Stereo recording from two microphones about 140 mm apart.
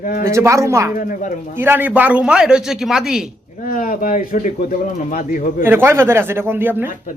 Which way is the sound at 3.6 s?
75° left (ahead or behind).